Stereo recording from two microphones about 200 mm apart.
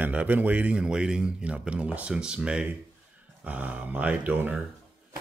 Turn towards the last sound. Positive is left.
turn(degrees=-5)  # may be behind; listen again after turning